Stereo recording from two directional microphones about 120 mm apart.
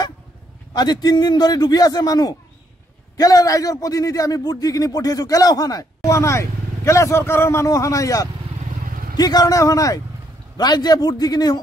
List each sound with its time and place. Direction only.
0.7 s a man's voice: 35° left (ahead or behind)